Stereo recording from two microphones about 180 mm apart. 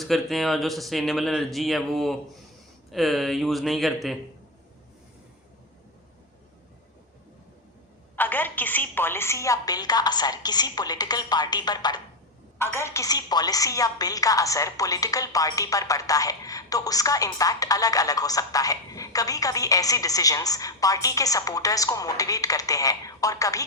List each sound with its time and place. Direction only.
0.0 s speech: centre (ahead or behind)
8.1 s a woman's voice: 10° left (ahead or behind)